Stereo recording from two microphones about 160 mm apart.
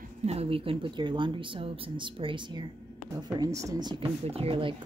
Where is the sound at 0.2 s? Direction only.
40° right (ahead or behind).